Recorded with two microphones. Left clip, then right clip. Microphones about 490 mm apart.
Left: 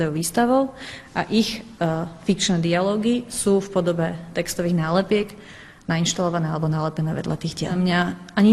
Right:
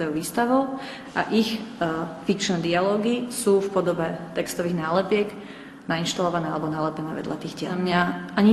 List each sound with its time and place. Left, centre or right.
0.0 s a man's voice: left